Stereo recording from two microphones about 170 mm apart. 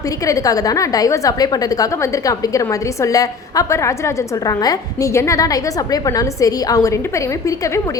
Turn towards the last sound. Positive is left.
turn(degrees=20)  # may be behind; listen again after turning